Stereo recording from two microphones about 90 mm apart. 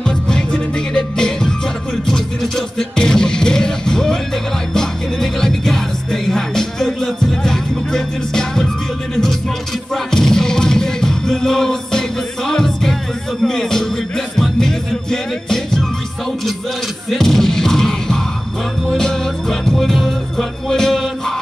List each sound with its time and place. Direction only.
0.3 s music: 10° left (ahead or behind)
17.1 s music: 5° left (ahead or behind)